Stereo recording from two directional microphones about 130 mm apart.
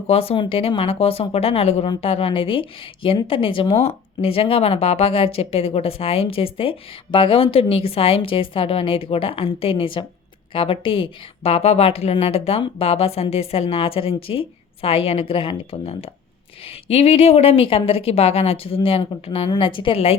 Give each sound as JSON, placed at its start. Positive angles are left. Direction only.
{"t": 0.1, "sound": "a woman's voice", "side_deg": 50}